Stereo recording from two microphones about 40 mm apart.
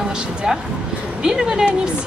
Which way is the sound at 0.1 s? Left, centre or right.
Right.